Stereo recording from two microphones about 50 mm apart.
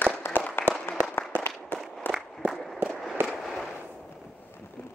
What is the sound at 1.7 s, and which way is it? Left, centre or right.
Walk, left.